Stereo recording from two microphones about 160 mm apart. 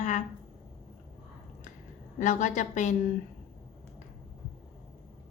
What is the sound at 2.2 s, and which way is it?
Speech, 50° left (ahead or behind).